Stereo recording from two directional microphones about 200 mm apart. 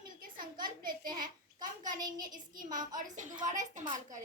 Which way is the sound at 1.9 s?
20° right (ahead or behind).